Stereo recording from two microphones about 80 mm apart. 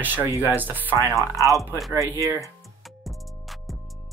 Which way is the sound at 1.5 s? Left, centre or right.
Centre.